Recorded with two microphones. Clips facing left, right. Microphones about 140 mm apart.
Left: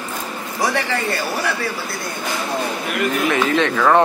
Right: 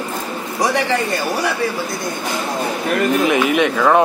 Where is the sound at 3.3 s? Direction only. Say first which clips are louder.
Right 2 dB; 15° right (ahead or behind).